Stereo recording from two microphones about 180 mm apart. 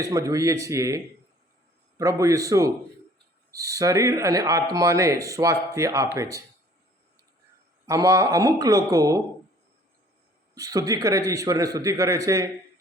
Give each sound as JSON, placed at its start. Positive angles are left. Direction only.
{"t": 0.0, "sound": "speech", "side_deg": -20}
{"t": 7.9, "sound": "a man's voice", "side_deg": -20}
{"t": 10.5, "sound": "a man's voice", "side_deg": -20}